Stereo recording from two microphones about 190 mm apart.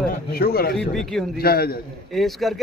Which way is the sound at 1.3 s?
55° left (ahead or behind).